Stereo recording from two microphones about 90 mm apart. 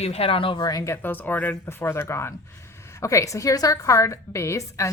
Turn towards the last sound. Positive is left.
turn(degrees=35)  # may be behind; listen again after turning